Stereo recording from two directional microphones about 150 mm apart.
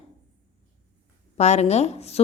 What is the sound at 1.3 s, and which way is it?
Speech, 45° left (ahead or behind).